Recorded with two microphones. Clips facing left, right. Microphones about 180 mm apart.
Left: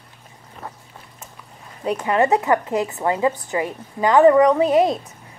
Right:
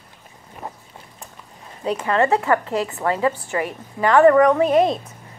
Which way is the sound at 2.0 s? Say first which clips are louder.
Left 1 dB; 20° left (ahead or behind).